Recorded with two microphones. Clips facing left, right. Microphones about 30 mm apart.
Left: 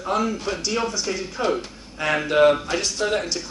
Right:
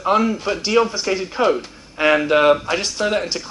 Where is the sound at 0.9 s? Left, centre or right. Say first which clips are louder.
Right 5 dB; right.